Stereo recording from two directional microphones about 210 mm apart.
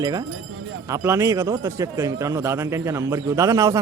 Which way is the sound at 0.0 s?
20° right (ahead or behind).